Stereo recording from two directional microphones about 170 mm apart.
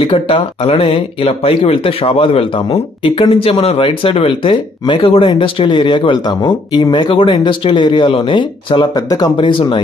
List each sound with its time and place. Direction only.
0.0 s speech: 30° left (ahead or behind)